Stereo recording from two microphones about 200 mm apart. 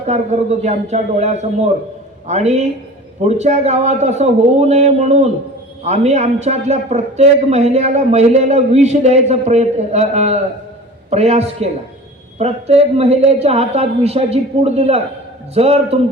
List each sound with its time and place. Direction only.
0.1 s a man's voice: 35° right (ahead or behind)